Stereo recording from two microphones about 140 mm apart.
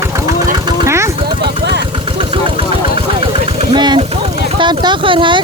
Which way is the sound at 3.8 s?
30° right (ahead or behind).